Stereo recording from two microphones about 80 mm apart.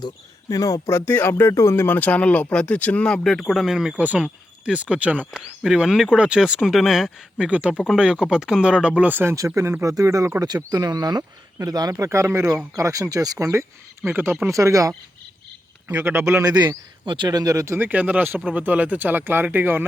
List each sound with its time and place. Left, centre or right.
0.5 s speech: left
0.9 s speech: left; by 3.9 s centre
3.9 s speech: centre
5.6 s speech: centre
7.3 s speech: centre
9.3 s speech: right
10.4 s speech: right
12.7 s speech: right
13.5 s speech: right
14.4 s speech: right
15.9 s speech: right
16.4 s speech: right
17.7 s speech: right